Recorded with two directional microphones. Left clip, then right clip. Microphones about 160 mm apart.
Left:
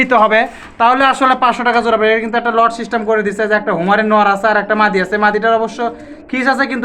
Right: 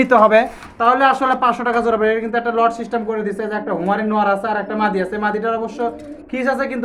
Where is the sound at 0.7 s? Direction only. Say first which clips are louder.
Left 3 dB; 10° left (ahead or behind).